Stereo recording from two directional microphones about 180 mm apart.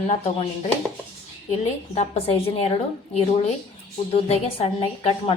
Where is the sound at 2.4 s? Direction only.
30° left (ahead or behind).